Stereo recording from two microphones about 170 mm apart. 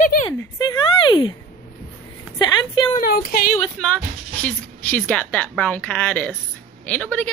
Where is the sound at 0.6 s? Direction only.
25° left (ahead or behind).